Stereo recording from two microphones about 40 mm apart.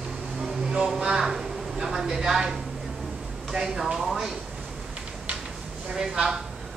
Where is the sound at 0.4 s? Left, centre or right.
Centre.